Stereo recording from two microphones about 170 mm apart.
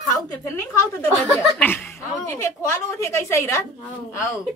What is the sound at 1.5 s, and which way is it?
A woman's voice, 10° left (ahead or behind).